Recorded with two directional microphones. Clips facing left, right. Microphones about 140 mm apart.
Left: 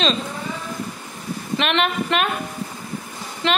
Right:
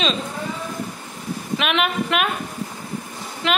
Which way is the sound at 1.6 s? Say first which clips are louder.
Left 1 dB; 5° right (ahead or behind).